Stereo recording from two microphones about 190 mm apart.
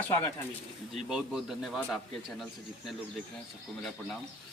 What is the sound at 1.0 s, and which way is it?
Speech, centre (ahead or behind).